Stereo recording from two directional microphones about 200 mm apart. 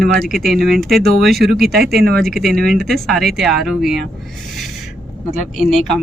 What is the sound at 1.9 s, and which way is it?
Speech, 50° right (ahead or behind).